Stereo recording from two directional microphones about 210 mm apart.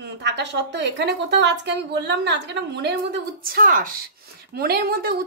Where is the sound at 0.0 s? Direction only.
55° right (ahead or behind).